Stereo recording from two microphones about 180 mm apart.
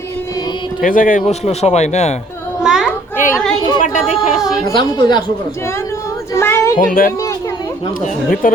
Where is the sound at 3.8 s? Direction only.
45° left (ahead or behind).